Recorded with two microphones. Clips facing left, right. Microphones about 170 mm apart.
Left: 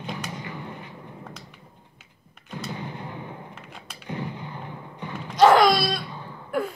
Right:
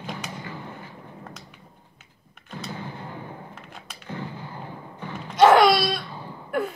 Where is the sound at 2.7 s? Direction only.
15° left (ahead or behind).